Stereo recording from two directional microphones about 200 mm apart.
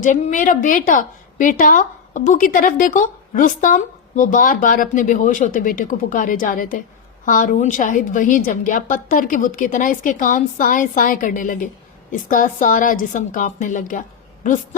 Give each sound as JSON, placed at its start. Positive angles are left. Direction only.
{"t": 0.0, "sound": "a woman's voice", "side_deg": 40}